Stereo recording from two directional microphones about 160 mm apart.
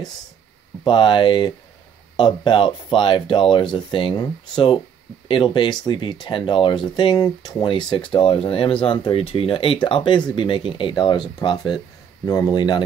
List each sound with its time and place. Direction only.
0.8 s speech: 30° left (ahead or behind)